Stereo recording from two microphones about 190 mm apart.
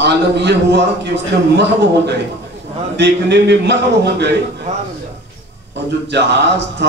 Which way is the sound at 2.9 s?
65° right (ahead or behind).